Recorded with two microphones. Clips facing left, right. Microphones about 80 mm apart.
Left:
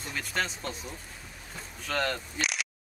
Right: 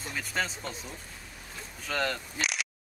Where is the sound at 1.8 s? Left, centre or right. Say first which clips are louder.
Left 1 dB; centre.